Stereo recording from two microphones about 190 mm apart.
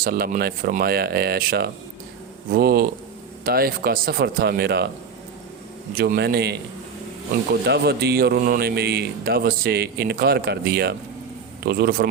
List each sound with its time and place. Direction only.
0.0 s speech: 50° right (ahead or behind)
5.9 s a man's voice: 50° right (ahead or behind)
7.7 s a man's voice: 60° right (ahead or behind)